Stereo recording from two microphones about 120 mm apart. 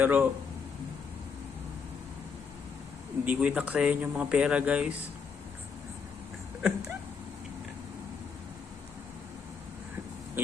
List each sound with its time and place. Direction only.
0.0 s speech: 15° right (ahead or behind)
3.2 s speech: 10° right (ahead or behind)
6.6 s a sound: 5° right (ahead or behind)
10.4 s oink: 15° right (ahead or behind)